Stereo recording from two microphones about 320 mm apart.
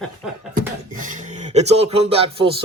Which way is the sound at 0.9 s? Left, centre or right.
Right.